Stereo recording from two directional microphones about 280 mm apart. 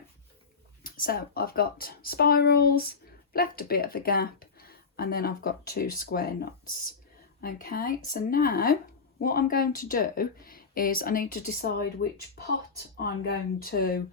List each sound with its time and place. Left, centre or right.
0.9 s speech: left
13.0 s speech: left